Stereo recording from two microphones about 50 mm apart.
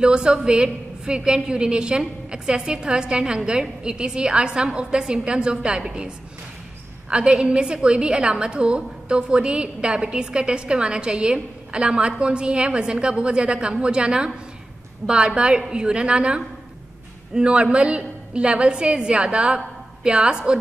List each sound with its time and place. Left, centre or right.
0.0 s a woman's voice: centre